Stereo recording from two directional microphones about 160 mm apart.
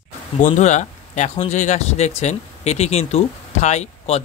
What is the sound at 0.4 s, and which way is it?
Speech, 45° left (ahead or behind).